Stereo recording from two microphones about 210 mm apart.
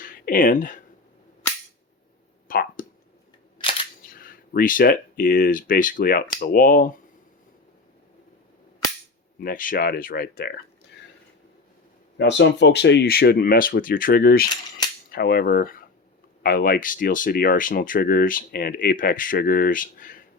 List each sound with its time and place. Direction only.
0.0 s speech: 40° left (ahead or behind)
2.5 s a sound: 40° left (ahead or behind)
4.0 s speech: 40° left (ahead or behind)
9.4 s speech: 40° left (ahead or behind)
12.1 s speech: 60° left (ahead or behind); by 20.2 s 40° left (ahead or behind)